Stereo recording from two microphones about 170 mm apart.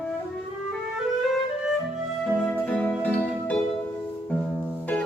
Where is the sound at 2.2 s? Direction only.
5° left (ahead or behind).